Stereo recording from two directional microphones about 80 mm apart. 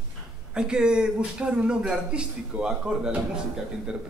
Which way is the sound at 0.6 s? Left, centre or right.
Centre.